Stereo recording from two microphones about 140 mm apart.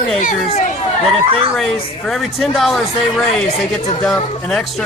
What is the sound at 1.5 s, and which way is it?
A man's voice, 5° left (ahead or behind).